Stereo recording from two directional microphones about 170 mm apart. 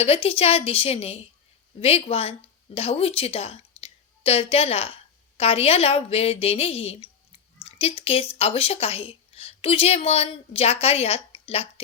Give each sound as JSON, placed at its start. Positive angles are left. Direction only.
{"t": 0.0, "sound": "a woman's voice", "side_deg": 35}